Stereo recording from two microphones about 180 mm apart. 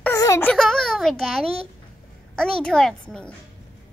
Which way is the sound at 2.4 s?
5° left (ahead or behind).